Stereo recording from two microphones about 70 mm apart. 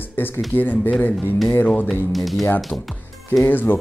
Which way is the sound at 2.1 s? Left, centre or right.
Centre.